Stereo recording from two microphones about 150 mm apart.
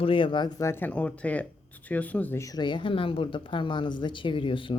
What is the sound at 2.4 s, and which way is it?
Speech, 30° left (ahead or behind).